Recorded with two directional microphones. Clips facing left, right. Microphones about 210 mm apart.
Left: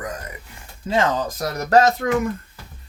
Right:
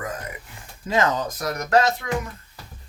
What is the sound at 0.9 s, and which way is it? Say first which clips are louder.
Speech: left 2 dB; 30° left (ahead or behind).